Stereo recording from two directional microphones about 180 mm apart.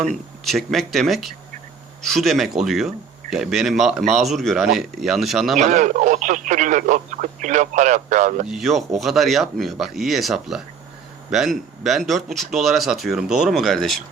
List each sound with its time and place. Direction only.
0.0 s speech: centre (ahead or behind)
5.5 s speech: 45° right (ahead or behind)
8.4 s speech: centre (ahead or behind)